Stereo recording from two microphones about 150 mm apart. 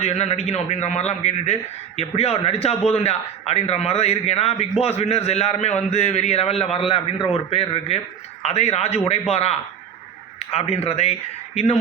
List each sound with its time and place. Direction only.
0.0 s a man's voice: 45° left (ahead or behind)